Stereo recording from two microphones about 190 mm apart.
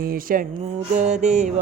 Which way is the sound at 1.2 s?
35° right (ahead or behind).